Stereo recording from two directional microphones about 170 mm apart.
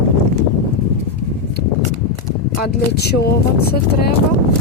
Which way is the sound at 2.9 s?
70° left (ahead or behind).